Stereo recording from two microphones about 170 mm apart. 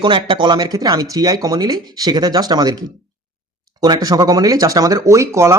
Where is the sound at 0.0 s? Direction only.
30° right (ahead or behind).